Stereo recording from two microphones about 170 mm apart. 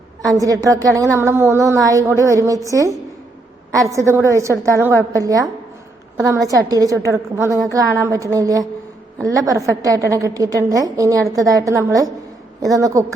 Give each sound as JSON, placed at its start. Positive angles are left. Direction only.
{"t": 0.2, "sound": "a woman's voice", "side_deg": -20}